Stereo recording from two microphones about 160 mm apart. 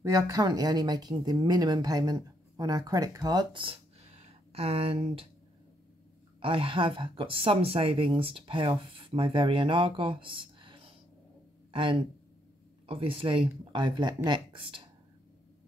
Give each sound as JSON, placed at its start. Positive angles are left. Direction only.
{"t": 0.0, "sound": "speech", "side_deg": -20}
{"t": 6.4, "sound": "speech", "side_deg": -35}